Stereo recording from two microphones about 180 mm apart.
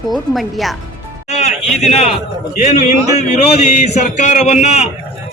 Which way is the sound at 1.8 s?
35° left (ahead or behind).